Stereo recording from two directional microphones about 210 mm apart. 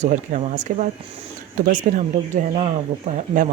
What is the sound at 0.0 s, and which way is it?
Speech, 35° right (ahead or behind).